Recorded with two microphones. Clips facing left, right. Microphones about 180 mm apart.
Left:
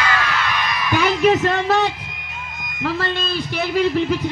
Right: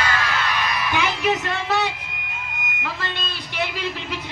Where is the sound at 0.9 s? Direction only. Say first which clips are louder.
Left 8 dB; 40° left (ahead or behind).